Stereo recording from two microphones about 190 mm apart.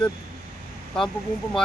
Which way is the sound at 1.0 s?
5° left (ahead or behind).